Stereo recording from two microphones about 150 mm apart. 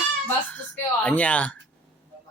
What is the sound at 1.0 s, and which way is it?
Speech, 10° left (ahead or behind).